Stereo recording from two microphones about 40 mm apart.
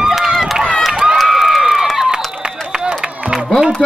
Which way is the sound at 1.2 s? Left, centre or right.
Centre.